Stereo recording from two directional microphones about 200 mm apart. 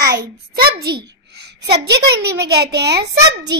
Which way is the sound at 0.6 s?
50° right (ahead or behind).